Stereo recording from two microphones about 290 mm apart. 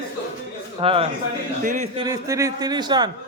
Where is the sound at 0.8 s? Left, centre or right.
Centre.